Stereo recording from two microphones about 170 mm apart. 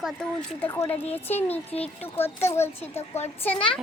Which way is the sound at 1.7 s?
35° left (ahead or behind).